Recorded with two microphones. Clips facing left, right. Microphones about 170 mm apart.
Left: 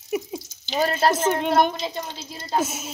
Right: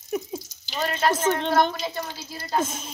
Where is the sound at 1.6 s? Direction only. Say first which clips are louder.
Left 2 dB; 20° left (ahead or behind).